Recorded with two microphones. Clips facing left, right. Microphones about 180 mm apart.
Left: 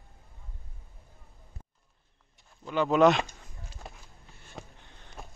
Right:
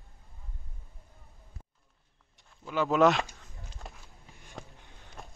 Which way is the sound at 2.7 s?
5° right (ahead or behind).